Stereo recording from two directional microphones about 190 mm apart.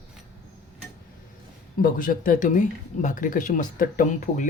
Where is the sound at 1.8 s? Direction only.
45° left (ahead or behind).